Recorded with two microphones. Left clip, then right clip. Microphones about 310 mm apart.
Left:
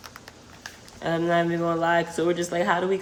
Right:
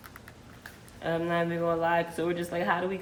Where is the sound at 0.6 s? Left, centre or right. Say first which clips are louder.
Left 5 dB; centre.